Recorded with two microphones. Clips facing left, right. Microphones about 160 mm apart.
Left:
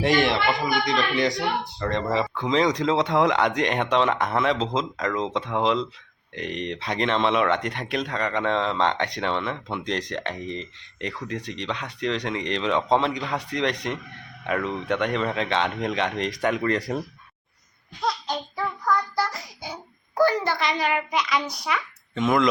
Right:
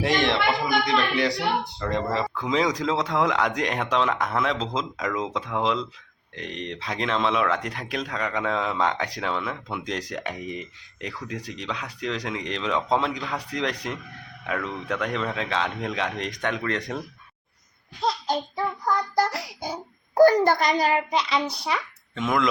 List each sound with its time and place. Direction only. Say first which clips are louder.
0.0 s speech: left 1 dB; centre (ahead or behind)
18.0 s child singing: right 2 dB; 25° right (ahead or behind)
19.3 s child singing: right 5 dB; 75° right (ahead or behind)
19.6 s a child's voice: right 4 dB; 40° right (ahead or behind)
22.1 s speech: left 3 dB; centre (ahead or behind)